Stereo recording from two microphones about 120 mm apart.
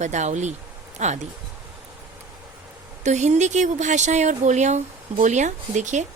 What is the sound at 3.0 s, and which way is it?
Speech, 80° right.